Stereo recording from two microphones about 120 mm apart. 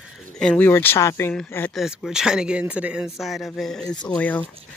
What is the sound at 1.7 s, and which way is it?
Speech, centre (ahead or behind).